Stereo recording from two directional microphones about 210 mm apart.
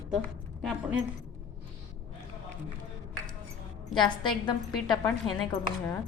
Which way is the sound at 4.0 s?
20° left (ahead or behind).